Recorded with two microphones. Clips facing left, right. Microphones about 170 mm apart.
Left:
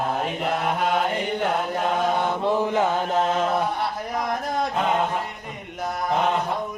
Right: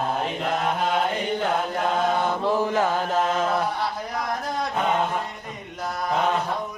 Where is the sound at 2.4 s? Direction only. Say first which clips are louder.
Left 2 dB; 20° left (ahead or behind).